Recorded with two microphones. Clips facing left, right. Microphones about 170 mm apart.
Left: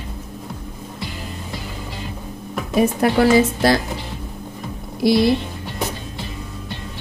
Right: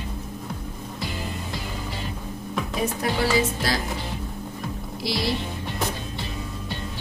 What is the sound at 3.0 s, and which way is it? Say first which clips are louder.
Speech: left 8 dB; 60° left (ahead or behind).